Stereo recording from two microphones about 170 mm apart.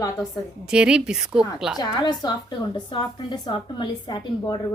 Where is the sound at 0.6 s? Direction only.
5° right (ahead or behind).